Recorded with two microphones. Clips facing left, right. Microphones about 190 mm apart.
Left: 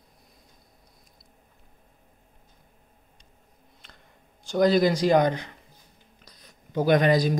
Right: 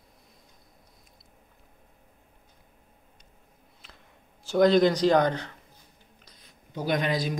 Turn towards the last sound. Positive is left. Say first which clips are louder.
# left 7 dB
turn(degrees=45)  # may be behind; listen again after turning